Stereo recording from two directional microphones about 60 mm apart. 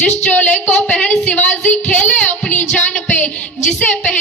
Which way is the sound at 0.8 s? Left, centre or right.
Centre.